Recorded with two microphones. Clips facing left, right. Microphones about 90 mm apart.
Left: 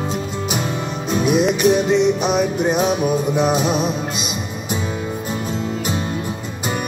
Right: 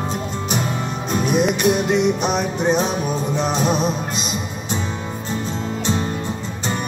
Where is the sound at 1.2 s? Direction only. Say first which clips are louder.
Left 2 dB; centre (ahead or behind).